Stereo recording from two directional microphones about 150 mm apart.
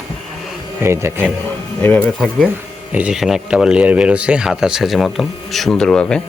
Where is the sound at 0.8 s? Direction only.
15° right (ahead or behind).